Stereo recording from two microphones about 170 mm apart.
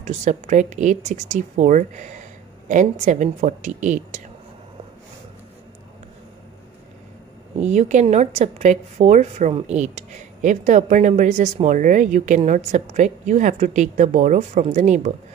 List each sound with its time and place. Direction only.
0.0 s a woman's voice: 45° right (ahead or behind)
7.5 s a woman's voice: 45° right (ahead or behind)